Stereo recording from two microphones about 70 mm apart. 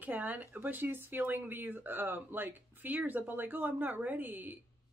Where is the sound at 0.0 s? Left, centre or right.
Right.